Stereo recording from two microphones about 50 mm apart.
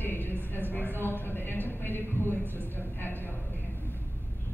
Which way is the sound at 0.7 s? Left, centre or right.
Left.